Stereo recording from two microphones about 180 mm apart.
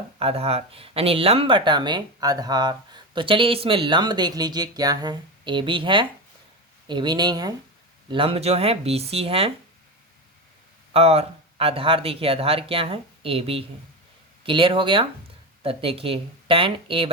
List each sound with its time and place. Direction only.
0.2 s speech: 35° right (ahead or behind)
10.9 s speech: 35° right (ahead or behind)